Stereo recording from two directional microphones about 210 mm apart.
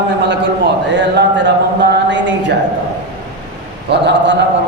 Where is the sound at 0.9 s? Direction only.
55° right (ahead or behind).